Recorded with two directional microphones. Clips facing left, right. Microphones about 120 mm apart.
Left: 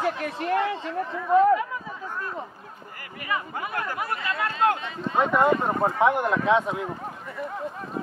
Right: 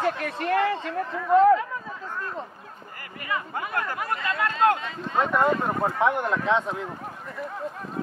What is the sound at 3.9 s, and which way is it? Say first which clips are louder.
Speech: right 1 dB; 20° left (ahead or behind).